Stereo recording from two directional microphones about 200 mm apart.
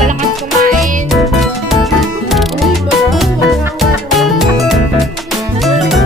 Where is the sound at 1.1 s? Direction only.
Centre (ahead or behind).